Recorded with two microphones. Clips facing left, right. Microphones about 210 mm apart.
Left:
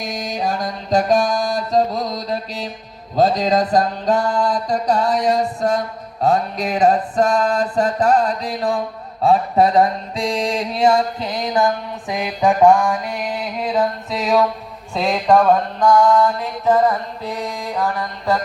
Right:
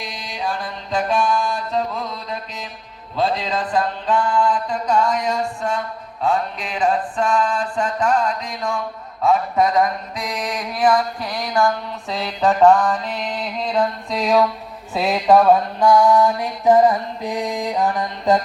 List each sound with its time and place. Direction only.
0.0 s music: 45° left (ahead or behind)
9.2 s mantra: 30° left (ahead or behind); by 18.3 s 15° right (ahead or behind)